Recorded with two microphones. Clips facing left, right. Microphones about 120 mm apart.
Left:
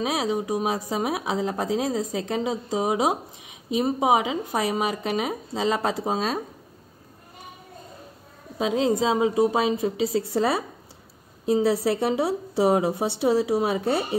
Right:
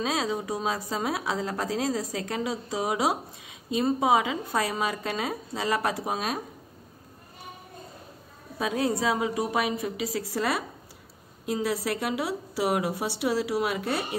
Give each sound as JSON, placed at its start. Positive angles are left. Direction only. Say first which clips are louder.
{"t": 0.0, "sound": "speech", "louder": "left 3 dB", "side_deg": 20}
{"t": 8.5, "sound": "speech", "louder": "left 5 dB", "side_deg": 20}